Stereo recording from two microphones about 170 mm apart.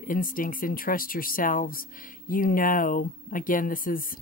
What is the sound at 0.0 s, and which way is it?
Speech, 55° left (ahead or behind).